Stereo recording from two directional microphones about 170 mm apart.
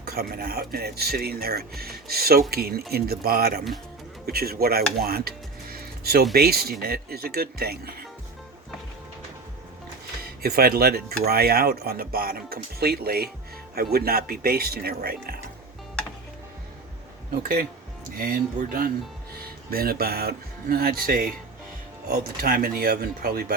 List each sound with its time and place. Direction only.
0.0 s speech: 60° right (ahead or behind)
10.4 s speech: 65° right (ahead or behind)
17.4 s speech: 60° right (ahead or behind)